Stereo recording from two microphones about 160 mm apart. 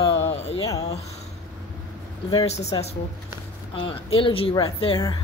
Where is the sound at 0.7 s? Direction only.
20° left (ahead or behind).